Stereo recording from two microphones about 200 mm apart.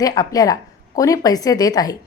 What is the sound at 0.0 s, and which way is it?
Speech, 20° left (ahead or behind).